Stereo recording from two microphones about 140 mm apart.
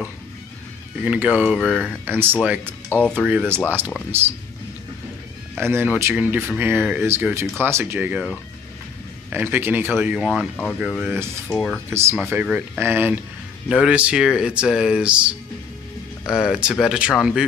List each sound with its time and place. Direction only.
1.0 s speech: 10° right (ahead or behind)
2.9 s speech: 10° left (ahead or behind)
3.4 s speech: 15° right (ahead or behind)
5.6 s speech: 15° right (ahead or behind)
9.3 s speech: 15° right (ahead or behind)
10.3 s speech: 5° left (ahead or behind)
11.1 s speech: 15° right (ahead or behind)
11.4 s speech: 5° left (ahead or behind)
11.9 s speech: 20° right (ahead or behind)